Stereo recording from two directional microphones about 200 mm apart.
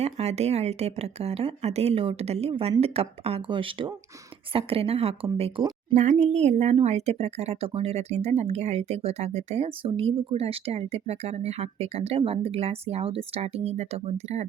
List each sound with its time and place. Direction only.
0.0 s speech: 30° right (ahead or behind)